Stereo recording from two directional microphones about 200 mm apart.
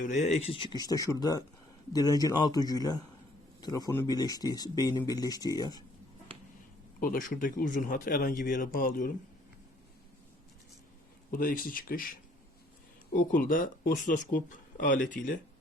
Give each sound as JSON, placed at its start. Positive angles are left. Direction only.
{"t": 0.1, "sound": "speech", "side_deg": 35}
{"t": 7.0, "sound": "speech", "side_deg": 45}
{"t": 11.3, "sound": "speech", "side_deg": 45}
{"t": 13.1, "sound": "speech", "side_deg": 45}